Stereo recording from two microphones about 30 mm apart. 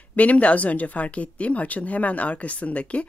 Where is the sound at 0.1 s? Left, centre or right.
Left.